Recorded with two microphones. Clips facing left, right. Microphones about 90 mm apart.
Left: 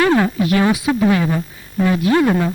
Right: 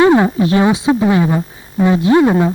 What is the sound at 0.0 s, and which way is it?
Speech, 25° right (ahead or behind).